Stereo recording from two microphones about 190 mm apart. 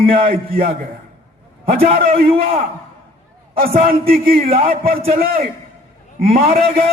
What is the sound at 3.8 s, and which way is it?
A man's voice, 50° right (ahead or behind).